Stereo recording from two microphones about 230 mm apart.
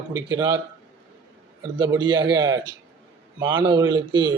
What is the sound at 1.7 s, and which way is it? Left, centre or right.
Speech, centre.